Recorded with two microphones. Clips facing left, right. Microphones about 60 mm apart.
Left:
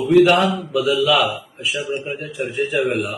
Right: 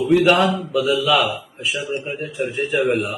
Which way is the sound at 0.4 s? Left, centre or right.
Right.